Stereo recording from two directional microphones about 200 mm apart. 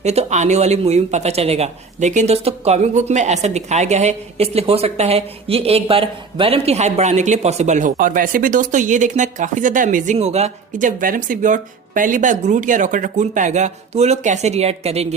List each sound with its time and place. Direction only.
0.0 s speech: 35° right (ahead or behind)